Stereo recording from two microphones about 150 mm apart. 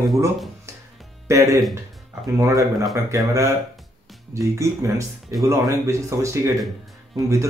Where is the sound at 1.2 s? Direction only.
20° right (ahead or behind).